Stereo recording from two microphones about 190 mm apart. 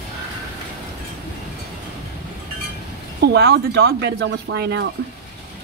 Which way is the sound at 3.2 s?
60° right (ahead or behind).